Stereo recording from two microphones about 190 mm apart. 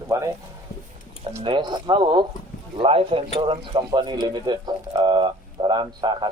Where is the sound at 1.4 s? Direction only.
25° right (ahead or behind).